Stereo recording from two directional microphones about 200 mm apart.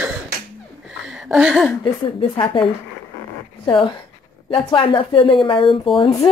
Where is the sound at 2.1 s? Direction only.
25° left (ahead or behind).